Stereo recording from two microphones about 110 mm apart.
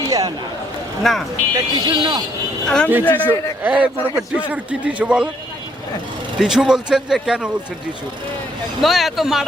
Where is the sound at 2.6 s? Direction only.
5° left (ahead or behind).